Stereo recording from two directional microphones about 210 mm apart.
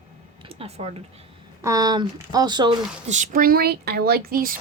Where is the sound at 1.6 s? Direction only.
15° right (ahead or behind).